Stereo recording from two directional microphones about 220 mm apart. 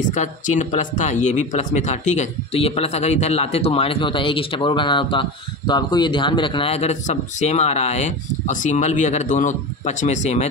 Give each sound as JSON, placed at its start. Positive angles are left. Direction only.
{"t": 0.1, "sound": "speech", "side_deg": 35}